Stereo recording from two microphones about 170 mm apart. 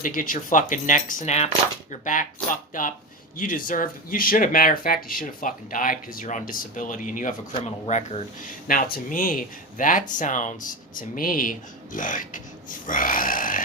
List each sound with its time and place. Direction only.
0.0 s speech: 50° left (ahead or behind)